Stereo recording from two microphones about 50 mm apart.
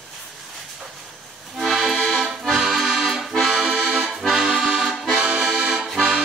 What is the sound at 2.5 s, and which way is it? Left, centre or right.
Accordion, centre.